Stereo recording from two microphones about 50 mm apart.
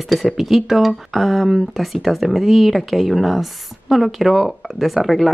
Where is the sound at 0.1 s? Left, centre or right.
Centre.